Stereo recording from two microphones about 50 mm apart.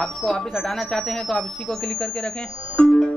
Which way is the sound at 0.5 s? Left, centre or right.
Centre.